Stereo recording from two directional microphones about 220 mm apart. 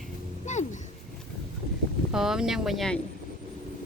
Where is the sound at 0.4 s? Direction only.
35° left (ahead or behind).